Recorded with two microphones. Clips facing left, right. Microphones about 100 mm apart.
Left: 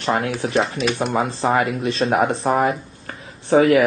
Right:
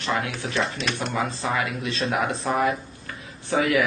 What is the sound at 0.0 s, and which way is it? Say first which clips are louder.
Speech: left 6 dB; 35° left (ahead or behind).